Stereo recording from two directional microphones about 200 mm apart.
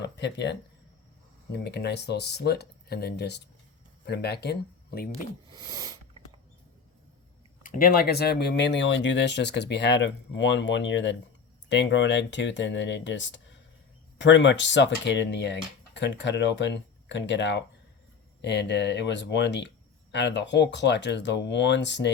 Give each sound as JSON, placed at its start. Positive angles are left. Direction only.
{"t": 0.0, "sound": "speech", "side_deg": 60}
{"t": 1.5, "sound": "speech", "side_deg": 55}
{"t": 5.5, "sound": "a sound", "side_deg": -20}
{"t": 7.6, "sound": "speech", "side_deg": 45}